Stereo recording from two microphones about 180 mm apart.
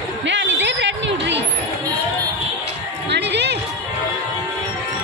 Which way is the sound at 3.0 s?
70° right (ahead or behind).